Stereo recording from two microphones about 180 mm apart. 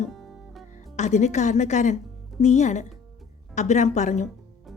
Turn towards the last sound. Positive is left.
turn(degrees=40)  # may be behind; listen again after turning